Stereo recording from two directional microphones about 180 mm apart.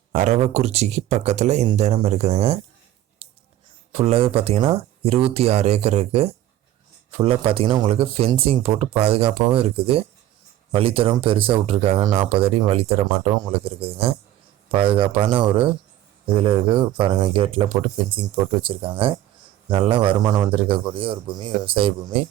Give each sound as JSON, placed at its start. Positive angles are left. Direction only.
{"t": 0.1, "sound": "speech", "side_deg": -40}
{"t": 3.2, "sound": "a sound", "side_deg": -35}
{"t": 3.9, "sound": "a man's voice", "side_deg": -35}